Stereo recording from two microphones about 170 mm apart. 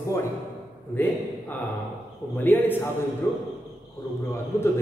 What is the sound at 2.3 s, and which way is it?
Speech, 10° left (ahead or behind).